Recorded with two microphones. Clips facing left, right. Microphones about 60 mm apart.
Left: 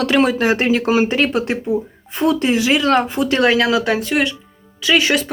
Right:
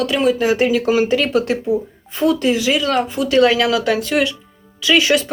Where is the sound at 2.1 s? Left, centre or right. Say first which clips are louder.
Even; left.